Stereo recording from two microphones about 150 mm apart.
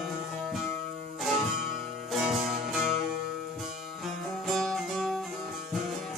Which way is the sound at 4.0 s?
Centre (ahead or behind).